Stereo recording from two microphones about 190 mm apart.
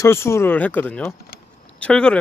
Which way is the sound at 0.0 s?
15° left (ahead or behind).